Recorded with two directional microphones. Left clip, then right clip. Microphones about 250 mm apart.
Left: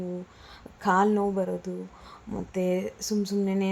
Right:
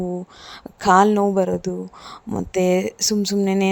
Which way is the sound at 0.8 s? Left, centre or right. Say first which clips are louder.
Right 9 dB; right.